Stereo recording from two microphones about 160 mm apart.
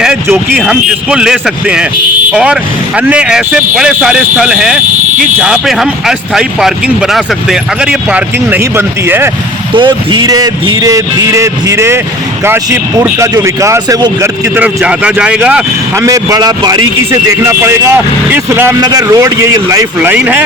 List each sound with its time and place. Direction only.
0.0 s speech: 5° right (ahead or behind)
9.7 s speech: 30° right (ahead or behind); by 16.0 s 10° right (ahead or behind)
16.0 s speech: 20° right (ahead or behind)
20.0 s speech: 10° right (ahead or behind)